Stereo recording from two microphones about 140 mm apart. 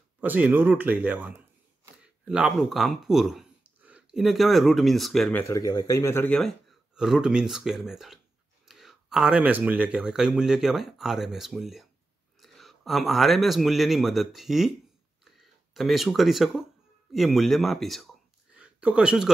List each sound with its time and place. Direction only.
0.2 s speech: 10° right (ahead or behind)
5.3 s speech: 20° left (ahead or behind)
7.0 s speech: 5° right (ahead or behind)